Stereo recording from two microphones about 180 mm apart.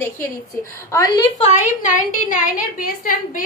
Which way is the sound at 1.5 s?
45° left (ahead or behind).